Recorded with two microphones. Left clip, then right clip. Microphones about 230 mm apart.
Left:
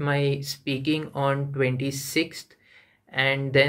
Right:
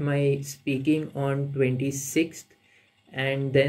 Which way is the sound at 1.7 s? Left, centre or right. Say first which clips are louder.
Even; left.